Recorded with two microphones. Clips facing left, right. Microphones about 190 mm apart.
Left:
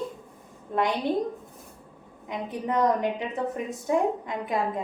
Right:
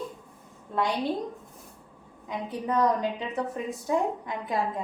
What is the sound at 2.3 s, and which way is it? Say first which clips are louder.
A woman's voice: left 1 dB; 20° left (ahead or behind).